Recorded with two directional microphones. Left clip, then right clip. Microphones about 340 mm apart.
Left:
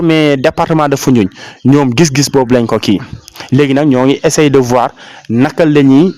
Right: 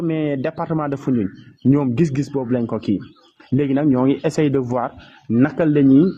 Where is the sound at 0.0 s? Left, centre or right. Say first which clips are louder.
Left 13 dB; left.